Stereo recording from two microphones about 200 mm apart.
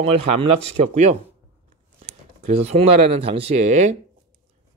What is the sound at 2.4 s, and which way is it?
Speech, 35° right (ahead or behind).